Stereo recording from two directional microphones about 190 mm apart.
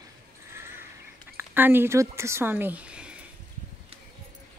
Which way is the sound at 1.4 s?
10° right (ahead or behind).